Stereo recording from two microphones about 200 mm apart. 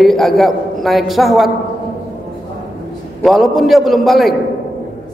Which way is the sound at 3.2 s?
Centre (ahead or behind).